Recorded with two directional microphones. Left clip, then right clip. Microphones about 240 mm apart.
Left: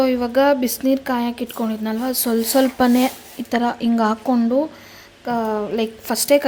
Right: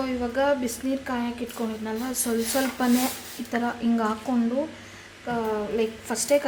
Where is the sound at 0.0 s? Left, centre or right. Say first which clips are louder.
Left 9 dB; left.